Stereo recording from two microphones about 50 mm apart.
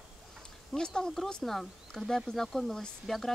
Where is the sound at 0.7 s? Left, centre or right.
Centre.